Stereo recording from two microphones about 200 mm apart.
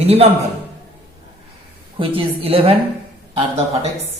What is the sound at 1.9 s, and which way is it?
Speech, 30° right (ahead or behind).